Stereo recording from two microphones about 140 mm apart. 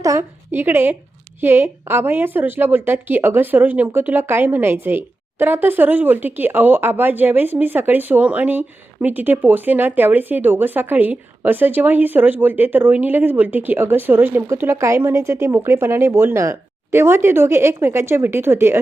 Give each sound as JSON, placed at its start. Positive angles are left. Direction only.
{"t": 0.0, "sound": "a woman's voice", "side_deg": -20}